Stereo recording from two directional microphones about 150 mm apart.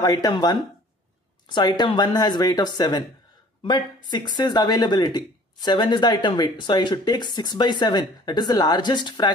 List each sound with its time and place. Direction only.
0.0 s speech: 25° left (ahead or behind)